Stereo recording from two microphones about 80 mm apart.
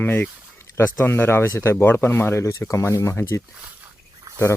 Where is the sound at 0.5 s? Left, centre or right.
Left.